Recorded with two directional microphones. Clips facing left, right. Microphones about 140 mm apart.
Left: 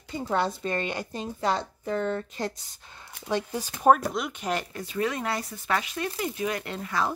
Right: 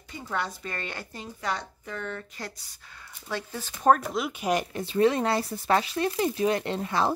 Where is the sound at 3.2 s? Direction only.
15° left (ahead or behind).